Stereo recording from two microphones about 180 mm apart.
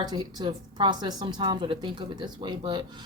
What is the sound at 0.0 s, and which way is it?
A woman's voice, 20° right (ahead or behind).